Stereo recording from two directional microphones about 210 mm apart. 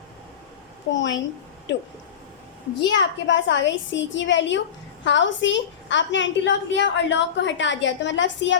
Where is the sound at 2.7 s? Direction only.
60° left (ahead or behind).